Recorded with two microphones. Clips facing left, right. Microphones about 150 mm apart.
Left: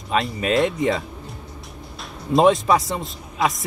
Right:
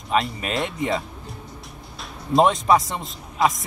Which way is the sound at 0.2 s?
Centre (ahead or behind).